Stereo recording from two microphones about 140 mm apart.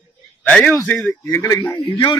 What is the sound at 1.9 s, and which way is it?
Speech, 35° left (ahead or behind).